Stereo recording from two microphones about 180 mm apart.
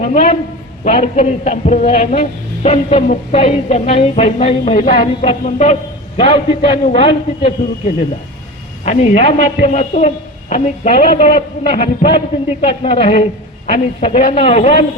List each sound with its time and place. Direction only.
0.0 s a man's voice: 45° left (ahead or behind)
8.8 s a woman's voice: 35° left (ahead or behind)